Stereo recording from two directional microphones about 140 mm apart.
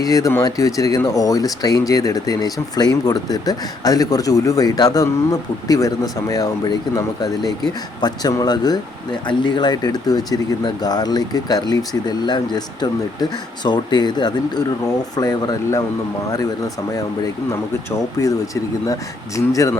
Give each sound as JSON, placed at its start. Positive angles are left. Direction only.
{"t": 0.0, "sound": "speech", "side_deg": 25}
{"t": 18.2, "sound": "speech", "side_deg": 25}